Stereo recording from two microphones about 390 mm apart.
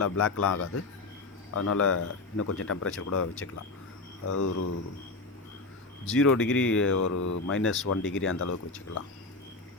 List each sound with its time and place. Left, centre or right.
0.0 s speech: left
4.4 s speech: left
6.1 s speech: left
7.0 s speech: left
7.5 s speech: left